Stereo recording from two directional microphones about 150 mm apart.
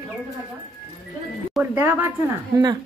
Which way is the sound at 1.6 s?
15° right (ahead or behind).